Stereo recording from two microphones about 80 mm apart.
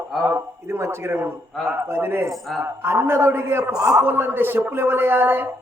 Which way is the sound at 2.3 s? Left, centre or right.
Centre.